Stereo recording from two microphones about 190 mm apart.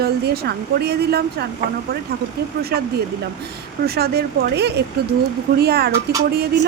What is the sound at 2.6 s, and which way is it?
A woman's voice, 55° right (ahead or behind).